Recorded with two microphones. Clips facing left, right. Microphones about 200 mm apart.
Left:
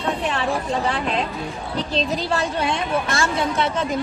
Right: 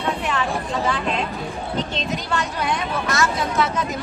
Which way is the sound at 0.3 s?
35° left (ahead or behind).